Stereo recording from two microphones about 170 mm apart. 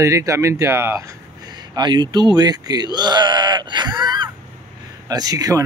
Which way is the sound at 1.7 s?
25° right (ahead or behind).